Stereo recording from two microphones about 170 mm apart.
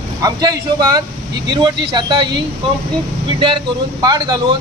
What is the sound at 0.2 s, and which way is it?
Speech, 20° right (ahead or behind).